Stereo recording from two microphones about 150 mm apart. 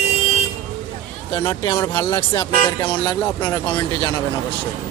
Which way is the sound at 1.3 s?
25° left (ahead or behind).